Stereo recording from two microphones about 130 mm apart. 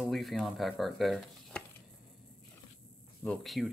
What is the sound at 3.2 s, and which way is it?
Speech, centre (ahead or behind).